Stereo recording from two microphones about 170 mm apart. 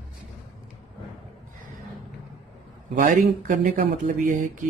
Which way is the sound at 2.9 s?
55° right (ahead or behind).